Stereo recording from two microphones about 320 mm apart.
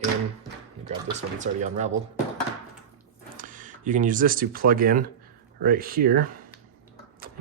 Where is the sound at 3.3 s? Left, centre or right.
Right.